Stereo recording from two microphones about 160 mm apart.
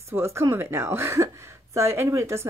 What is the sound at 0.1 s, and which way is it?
A woman's voice, 15° right (ahead or behind).